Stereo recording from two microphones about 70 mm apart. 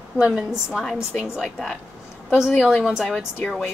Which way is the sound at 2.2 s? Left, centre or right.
Centre.